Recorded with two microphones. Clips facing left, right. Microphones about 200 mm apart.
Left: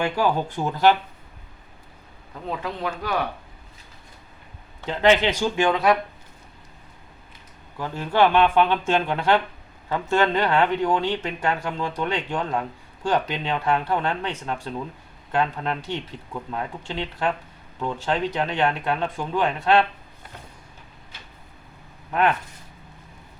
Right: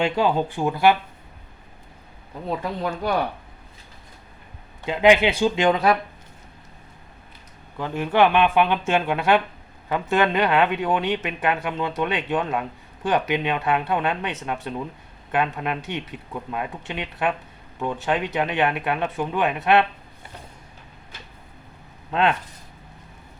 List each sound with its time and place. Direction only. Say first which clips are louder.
0.0 s speech: right 2 dB; 20° right (ahead or behind)
4.9 s speech: right 2 dB; 15° right (ahead or behind)
7.8 s speech: right 1 dB; 20° right (ahead or behind)
22.1 s speech: even; 25° right (ahead or behind)